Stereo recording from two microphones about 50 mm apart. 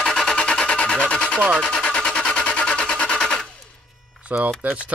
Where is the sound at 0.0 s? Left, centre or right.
Centre.